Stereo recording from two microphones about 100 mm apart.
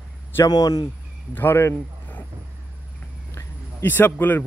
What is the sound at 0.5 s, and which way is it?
Speech, 40° left (ahead or behind).